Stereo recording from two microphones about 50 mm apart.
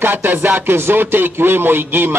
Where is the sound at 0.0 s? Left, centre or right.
Right.